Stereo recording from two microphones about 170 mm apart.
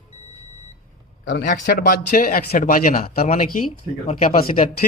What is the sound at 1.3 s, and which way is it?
Speech, 60° left (ahead or behind).